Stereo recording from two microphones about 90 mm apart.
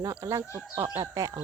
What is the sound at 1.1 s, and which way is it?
Speech, 40° right (ahead or behind).